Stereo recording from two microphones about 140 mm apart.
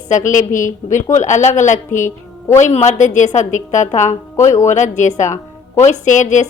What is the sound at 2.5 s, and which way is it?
A woman's voice, 55° left (ahead or behind).